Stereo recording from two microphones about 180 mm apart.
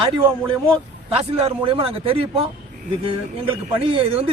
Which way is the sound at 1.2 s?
30° right (ahead or behind).